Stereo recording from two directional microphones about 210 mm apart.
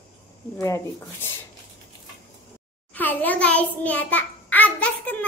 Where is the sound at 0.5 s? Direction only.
15° left (ahead or behind).